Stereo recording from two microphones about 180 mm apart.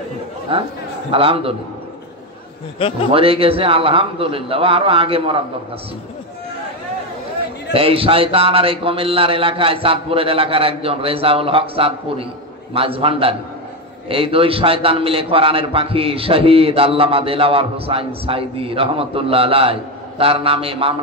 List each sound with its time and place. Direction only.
0.5 s a man's voice: 30° right (ahead or behind)
3.1 s a man's voice: 30° right (ahead or behind)
7.7 s a man's voice: 30° right (ahead or behind)